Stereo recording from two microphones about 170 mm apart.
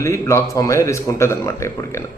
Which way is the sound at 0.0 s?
15° left (ahead or behind).